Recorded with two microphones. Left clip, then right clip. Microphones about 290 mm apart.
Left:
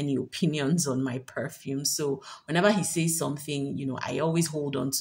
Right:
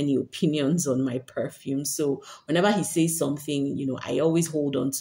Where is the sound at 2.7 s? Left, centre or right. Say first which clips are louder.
Right 5 dB; left.